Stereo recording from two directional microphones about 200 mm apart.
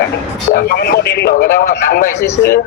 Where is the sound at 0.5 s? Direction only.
50° left (ahead or behind).